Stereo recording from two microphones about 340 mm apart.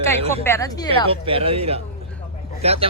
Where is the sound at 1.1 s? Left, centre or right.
Centre.